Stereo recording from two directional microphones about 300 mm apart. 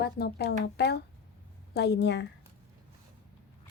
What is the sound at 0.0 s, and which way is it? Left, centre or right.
Speech, left.